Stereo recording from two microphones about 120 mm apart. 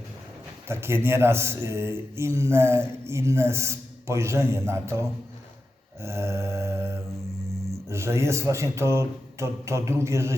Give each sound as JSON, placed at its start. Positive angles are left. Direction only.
{"t": 0.7, "sound": "speech", "side_deg": -20}